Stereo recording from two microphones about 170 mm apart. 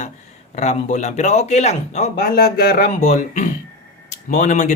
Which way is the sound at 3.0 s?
45° left (ahead or behind).